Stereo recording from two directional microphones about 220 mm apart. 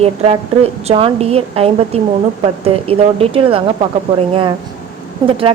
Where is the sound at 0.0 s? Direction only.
25° right (ahead or behind).